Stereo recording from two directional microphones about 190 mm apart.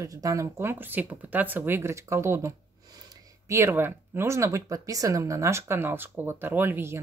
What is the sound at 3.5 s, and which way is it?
Speech, 10° right (ahead or behind).